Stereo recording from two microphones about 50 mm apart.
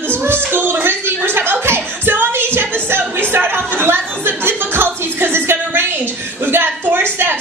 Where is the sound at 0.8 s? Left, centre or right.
Right.